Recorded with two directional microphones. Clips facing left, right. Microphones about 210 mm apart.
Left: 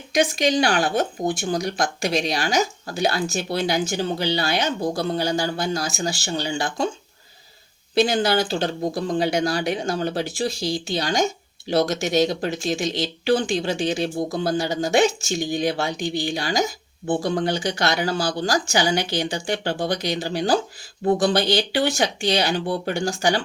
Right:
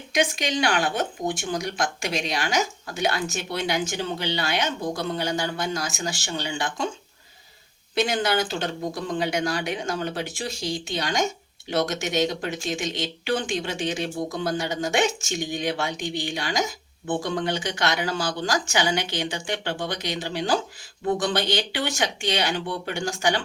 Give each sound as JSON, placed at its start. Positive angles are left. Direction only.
{"t": 0.1, "sound": "speech", "side_deg": 35}
{"t": 7.9, "sound": "speech", "side_deg": 35}